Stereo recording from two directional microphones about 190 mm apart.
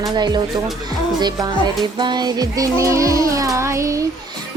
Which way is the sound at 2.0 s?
20° right (ahead or behind).